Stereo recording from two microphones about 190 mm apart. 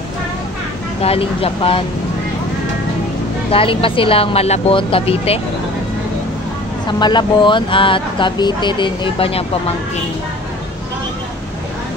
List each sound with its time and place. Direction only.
1.0 s speech: 30° left (ahead or behind)
3.5 s speech: 30° left (ahead or behind)
6.9 s speech: 25° left (ahead or behind)